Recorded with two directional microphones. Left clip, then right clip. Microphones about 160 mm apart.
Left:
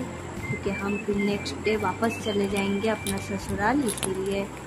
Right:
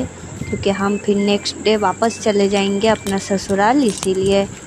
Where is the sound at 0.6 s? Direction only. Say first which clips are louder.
Right 12 dB; 50° right (ahead or behind).